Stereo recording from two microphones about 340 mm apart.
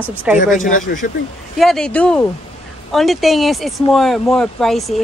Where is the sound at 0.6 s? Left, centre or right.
Left.